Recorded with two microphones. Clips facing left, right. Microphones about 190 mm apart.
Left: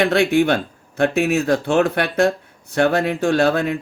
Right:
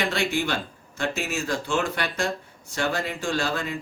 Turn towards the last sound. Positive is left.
turn(degrees=60)  # may be behind; listen again after turning